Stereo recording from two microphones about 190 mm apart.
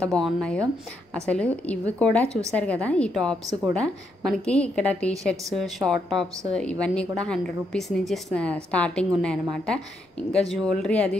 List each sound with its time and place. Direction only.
0.0 s a woman's voice: 5° left (ahead or behind)